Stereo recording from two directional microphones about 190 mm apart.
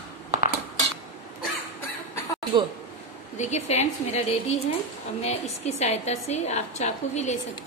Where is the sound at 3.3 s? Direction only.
35° left (ahead or behind).